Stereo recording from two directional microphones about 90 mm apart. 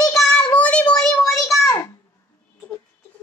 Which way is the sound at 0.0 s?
5° left (ahead or behind).